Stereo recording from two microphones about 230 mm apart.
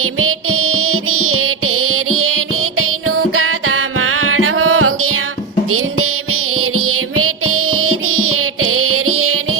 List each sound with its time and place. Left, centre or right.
0.0 s music: right
6.6 s music: right